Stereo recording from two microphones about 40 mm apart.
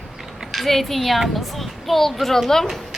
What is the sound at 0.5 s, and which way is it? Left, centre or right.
A child's voice, centre.